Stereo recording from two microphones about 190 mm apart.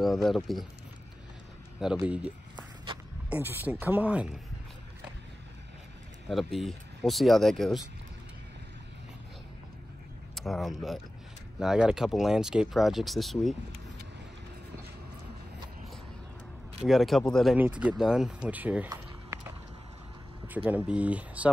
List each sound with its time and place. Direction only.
0.0 s speech: centre (ahead or behind)
2.0 s speech: 5° right (ahead or behind)
2.5 s walk: 25° right (ahead or behind)
3.3 s speech: 10° right (ahead or behind)
6.2 s speech: centre (ahead or behind)
10.3 s speech: centre (ahead or behind)
16.8 s speech: centre (ahead or behind)
18.9 s a sound: 15° right (ahead or behind)
20.4 s speech: 10° right (ahead or behind)